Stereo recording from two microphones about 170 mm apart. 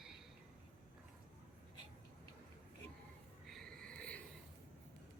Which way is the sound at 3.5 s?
5° left (ahead or behind).